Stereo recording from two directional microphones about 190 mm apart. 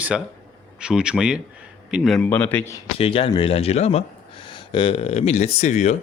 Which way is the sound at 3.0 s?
30° left (ahead or behind).